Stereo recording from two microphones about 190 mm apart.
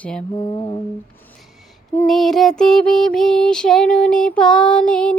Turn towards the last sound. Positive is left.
turn(degrees=5)  # may be behind; listen again after turning